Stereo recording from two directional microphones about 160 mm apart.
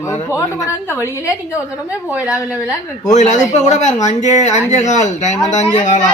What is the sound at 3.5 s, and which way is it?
Speech, 45° left (ahead or behind).